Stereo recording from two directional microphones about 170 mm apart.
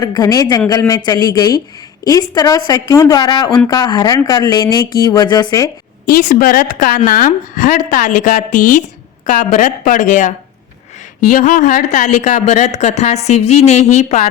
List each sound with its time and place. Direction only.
0.0 s a woman's voice: 20° left (ahead or behind)
6.1 s speech: 60° left (ahead or behind); by 14.3 s 40° left (ahead or behind)